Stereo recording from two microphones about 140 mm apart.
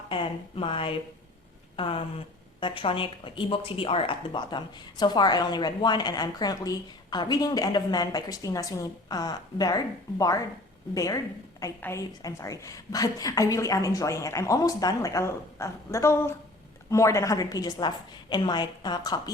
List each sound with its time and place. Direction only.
0.1 s a woman's voice: 40° left (ahead or behind)